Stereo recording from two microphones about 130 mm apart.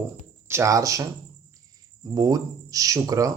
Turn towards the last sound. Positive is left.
turn(degrees=-25)  # may be behind; listen again after turning